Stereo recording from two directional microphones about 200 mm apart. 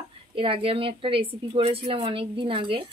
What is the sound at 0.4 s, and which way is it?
A woman's voice, 25° right (ahead or behind).